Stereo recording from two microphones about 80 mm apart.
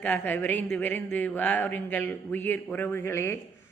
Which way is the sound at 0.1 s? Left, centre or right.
Left.